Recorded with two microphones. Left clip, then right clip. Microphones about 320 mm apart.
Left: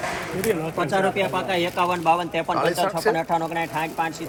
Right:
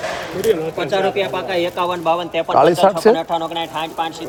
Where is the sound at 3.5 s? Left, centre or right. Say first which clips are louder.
Right 3 dB; left.